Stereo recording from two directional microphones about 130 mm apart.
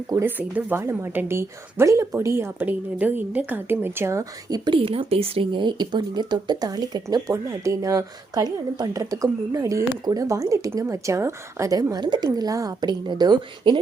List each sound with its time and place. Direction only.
0.1 s a woman's voice: 20° right (ahead or behind)